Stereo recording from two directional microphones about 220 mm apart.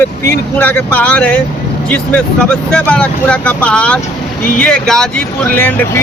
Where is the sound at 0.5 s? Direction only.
10° left (ahead or behind).